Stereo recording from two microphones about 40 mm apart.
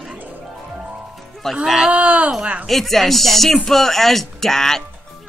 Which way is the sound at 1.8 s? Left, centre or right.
Right.